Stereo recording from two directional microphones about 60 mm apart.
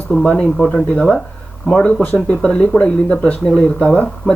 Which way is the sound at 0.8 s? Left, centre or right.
Centre.